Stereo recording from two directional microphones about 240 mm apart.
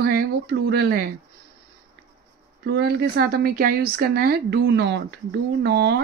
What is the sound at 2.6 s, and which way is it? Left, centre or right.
A woman's voice, right.